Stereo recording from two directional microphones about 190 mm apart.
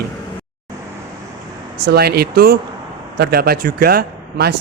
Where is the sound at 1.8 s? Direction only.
55° right (ahead or behind).